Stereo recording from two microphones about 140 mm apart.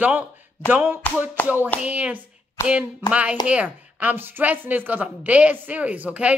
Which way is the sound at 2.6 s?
20° left (ahead or behind).